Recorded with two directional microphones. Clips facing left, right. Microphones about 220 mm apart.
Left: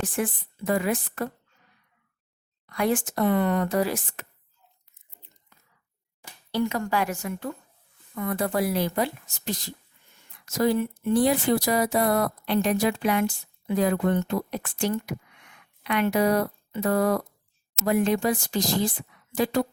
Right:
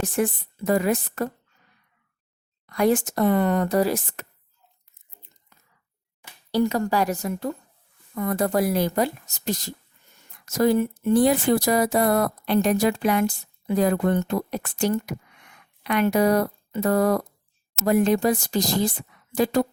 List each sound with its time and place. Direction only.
0.0 s a woman's voice: 40° right (ahead or behind)
2.6 s a woman's voice: 40° right (ahead or behind)
6.5 s a woman's voice: 40° right (ahead or behind)